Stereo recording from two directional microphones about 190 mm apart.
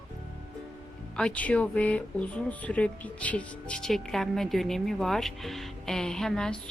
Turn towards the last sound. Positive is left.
turn(degrees=5)  # may be behind; listen again after turning